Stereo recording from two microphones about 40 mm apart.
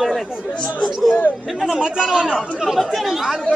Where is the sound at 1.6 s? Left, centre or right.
Centre.